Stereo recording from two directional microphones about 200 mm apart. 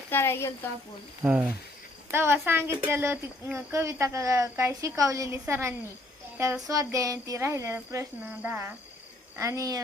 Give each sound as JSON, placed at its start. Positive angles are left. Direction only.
{"t": 0.1, "sound": "speech", "side_deg": 10}
{"t": 1.2, "sound": "speech", "side_deg": -10}